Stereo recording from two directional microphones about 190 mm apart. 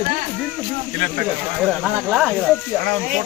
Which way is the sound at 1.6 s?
Centre (ahead or behind).